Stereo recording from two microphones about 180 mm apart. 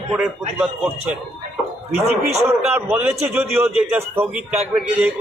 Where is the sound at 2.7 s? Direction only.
10° right (ahead or behind).